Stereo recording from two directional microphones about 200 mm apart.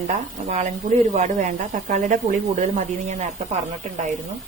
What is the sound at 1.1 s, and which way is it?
Speech, 35° right (ahead or behind).